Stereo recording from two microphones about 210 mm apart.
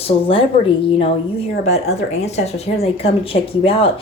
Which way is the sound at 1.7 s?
30° left (ahead or behind).